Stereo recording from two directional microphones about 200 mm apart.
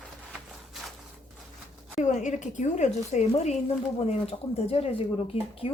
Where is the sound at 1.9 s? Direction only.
35° left (ahead or behind).